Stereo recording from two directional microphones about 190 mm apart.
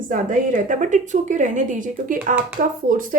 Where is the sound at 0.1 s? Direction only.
45° right (ahead or behind).